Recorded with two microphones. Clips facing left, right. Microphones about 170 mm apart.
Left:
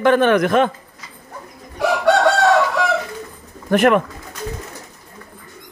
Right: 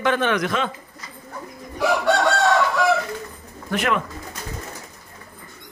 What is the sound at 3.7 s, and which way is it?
Speech, 55° left (ahead or behind).